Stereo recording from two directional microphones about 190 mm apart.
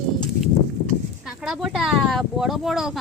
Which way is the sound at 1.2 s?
Centre (ahead or behind).